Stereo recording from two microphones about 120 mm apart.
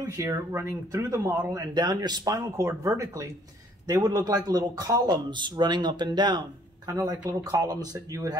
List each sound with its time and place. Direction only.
0.0 s speech: 25° right (ahead or behind)